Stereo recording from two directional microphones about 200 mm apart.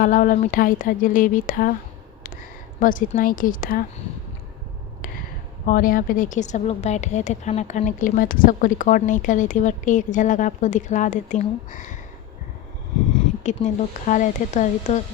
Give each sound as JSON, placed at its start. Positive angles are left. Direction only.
{"t": 0.0, "sound": "speech", "side_deg": 40}
{"t": 2.8, "sound": "speech", "side_deg": 40}
{"t": 5.6, "sound": "speech", "side_deg": 45}
{"t": 13.1, "sound": "a sound", "side_deg": 35}
{"t": 14.1, "sound": "speech", "side_deg": 40}